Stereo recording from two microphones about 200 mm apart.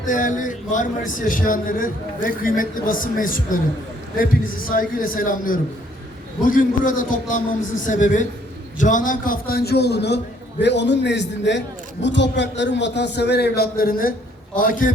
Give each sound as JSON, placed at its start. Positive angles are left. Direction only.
{"t": 0.0, "sound": "a man's voice", "side_deg": 40}
{"t": 4.7, "sound": "a man's voice", "side_deg": 45}